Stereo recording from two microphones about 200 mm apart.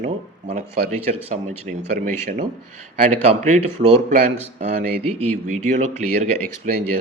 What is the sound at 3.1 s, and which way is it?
Speech, 30° right (ahead or behind).